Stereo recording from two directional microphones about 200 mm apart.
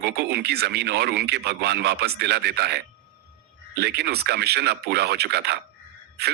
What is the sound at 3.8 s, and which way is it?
A man's voice, 55° right (ahead or behind).